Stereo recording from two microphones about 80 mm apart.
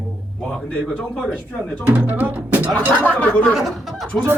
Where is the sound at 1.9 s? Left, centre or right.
Centre.